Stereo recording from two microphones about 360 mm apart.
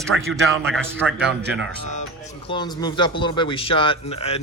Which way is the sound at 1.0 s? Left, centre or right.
Centre.